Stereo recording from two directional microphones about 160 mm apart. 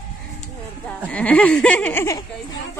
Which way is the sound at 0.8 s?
10° left (ahead or behind).